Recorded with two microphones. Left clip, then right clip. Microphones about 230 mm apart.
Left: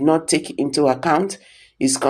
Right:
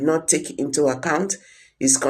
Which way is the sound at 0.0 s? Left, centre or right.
Left.